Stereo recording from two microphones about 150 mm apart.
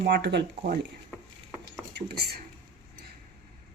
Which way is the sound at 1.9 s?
90° right.